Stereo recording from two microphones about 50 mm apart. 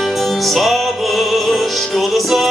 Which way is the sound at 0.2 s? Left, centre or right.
Centre.